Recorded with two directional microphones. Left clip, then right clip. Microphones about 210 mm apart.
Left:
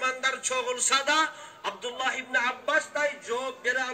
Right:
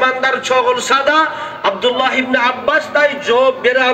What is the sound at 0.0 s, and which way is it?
A man's voice, 20° right (ahead or behind).